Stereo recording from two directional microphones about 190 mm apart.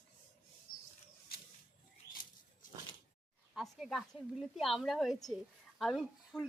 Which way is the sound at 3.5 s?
Centre (ahead or behind).